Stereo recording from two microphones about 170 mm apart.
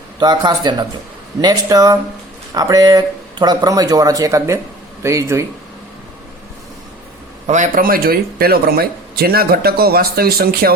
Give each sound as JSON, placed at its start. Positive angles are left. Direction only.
{"t": 0.2, "sound": "speech", "side_deg": -25}
{"t": 7.4, "sound": "speech", "side_deg": -45}